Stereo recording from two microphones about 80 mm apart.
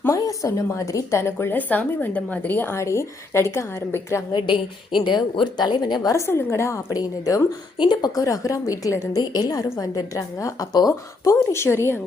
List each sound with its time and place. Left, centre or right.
0.1 s a woman's voice: left
4.3 s a woman's voice: left
6.1 s a woman's voice: left
7.8 s a woman's voice: left